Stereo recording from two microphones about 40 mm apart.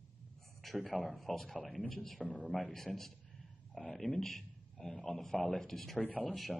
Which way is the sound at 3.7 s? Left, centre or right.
Centre.